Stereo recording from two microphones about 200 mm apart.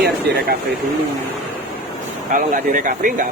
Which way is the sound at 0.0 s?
55° right (ahead or behind).